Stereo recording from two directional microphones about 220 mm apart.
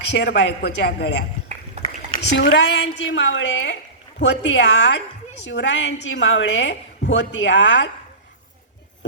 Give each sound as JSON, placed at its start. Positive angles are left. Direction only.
{"t": 0.1, "sound": "a man's voice", "side_deg": 55}
{"t": 2.3, "sound": "a woman's voice", "side_deg": 50}